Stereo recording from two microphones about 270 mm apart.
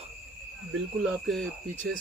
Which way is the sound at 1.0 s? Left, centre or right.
Centre.